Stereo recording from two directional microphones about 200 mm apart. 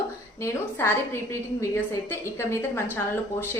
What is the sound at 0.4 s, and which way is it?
A woman's voice, 10° left (ahead or behind).